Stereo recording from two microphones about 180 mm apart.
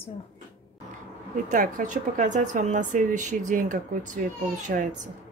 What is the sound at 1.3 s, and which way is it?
A woman's voice, 45° right (ahead or behind).